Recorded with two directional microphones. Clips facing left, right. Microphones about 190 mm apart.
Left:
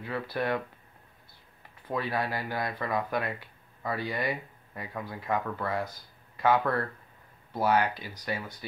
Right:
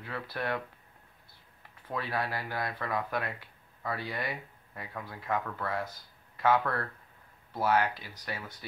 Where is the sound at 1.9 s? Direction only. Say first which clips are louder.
Left 3 dB; centre (ahead or behind).